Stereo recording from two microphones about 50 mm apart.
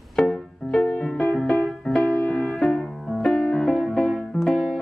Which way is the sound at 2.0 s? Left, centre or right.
Left.